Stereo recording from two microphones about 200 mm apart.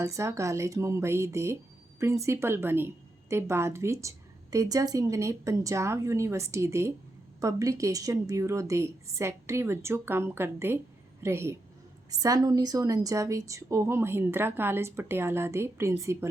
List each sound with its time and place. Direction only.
0.0 s a woman's voice: 15° right (ahead or behind)